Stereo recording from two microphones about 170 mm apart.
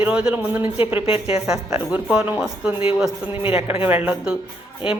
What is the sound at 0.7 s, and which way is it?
Speech, 30° left (ahead or behind).